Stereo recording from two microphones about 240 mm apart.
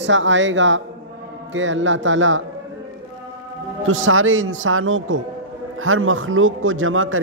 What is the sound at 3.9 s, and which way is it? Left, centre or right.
A man's voice, right.